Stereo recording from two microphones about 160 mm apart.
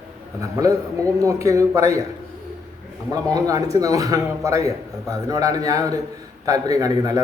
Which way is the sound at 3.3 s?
20° right (ahead or behind).